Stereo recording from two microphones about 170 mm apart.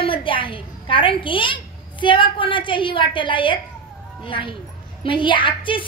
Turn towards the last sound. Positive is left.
turn(degrees=30)  # may be behind; listen again after turning